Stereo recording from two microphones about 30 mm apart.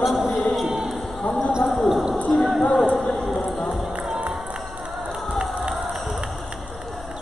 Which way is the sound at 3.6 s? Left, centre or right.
Centre.